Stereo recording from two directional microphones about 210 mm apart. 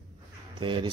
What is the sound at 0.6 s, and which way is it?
Speech, 25° right (ahead or behind).